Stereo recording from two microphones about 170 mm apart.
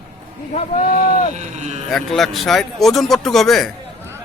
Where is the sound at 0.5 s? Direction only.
50° left (ahead or behind).